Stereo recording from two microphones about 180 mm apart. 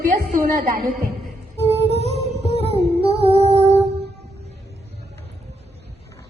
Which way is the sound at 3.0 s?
35° right (ahead or behind).